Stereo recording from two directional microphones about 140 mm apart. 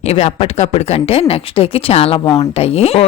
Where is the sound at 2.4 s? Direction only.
45° left (ahead or behind).